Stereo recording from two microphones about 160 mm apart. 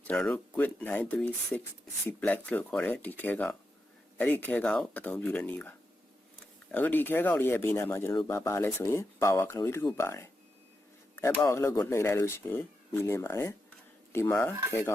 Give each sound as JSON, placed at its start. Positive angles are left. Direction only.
{"t": 0.1, "sound": "speech", "side_deg": 5}